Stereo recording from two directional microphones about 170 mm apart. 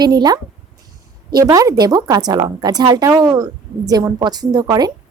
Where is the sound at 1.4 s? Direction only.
20° right (ahead or behind).